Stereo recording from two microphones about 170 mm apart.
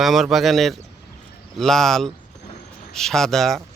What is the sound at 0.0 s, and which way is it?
Speech, centre (ahead or behind).